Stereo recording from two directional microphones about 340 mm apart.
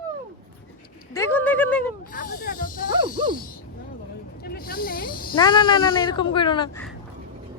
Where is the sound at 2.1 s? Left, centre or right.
Left.